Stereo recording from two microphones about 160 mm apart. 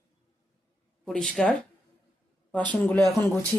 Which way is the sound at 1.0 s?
5° left (ahead or behind).